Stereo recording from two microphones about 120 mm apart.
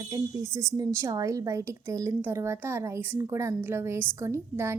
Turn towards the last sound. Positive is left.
turn(degrees=-25)  # may be behind; listen again after turning